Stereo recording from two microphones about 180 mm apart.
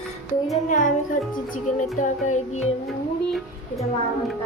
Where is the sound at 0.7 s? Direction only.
45° left (ahead or behind).